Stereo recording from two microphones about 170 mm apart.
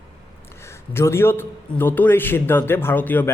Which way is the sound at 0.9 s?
15° left (ahead or behind).